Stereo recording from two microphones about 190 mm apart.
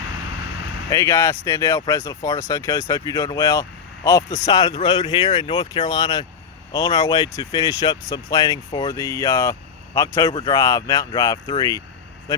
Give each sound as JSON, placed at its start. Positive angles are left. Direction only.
{"t": 0.9, "sound": "speech", "side_deg": 15}